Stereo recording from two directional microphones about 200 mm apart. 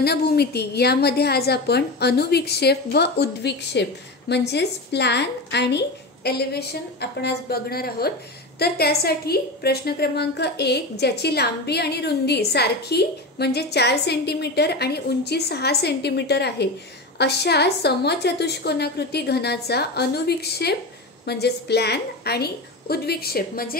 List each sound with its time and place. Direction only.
0.0 s a woman's voice: 55° left (ahead or behind)